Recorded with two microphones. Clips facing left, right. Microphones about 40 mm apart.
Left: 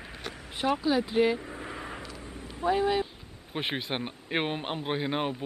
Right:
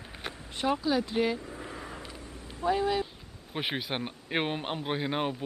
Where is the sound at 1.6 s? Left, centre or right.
Left.